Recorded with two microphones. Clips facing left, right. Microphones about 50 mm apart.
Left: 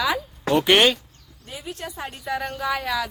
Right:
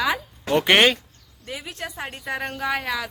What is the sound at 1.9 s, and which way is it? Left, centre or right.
A woman's voice, right.